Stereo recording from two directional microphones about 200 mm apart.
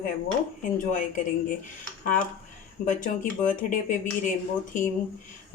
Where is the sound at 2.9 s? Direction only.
40° left (ahead or behind).